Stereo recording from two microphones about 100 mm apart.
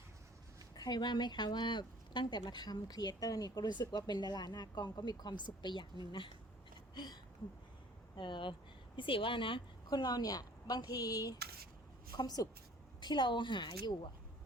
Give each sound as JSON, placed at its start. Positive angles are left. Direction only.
{"t": 0.8, "sound": "speech", "side_deg": 45}
{"t": 6.9, "sound": "a sound", "side_deg": 45}
{"t": 8.1, "sound": "a woman's voice", "side_deg": 50}